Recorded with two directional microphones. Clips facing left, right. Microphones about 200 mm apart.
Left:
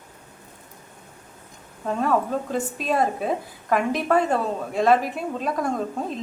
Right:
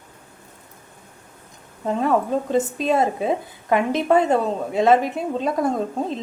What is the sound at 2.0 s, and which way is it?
A woman's voice, 25° right (ahead or behind).